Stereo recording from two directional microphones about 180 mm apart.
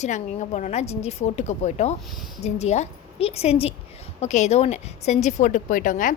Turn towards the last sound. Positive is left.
turn(degrees=45)  # may be behind; listen again after turning